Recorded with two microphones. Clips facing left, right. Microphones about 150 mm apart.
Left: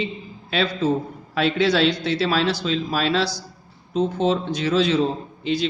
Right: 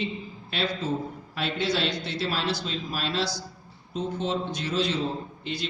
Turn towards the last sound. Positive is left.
turn(degrees=90)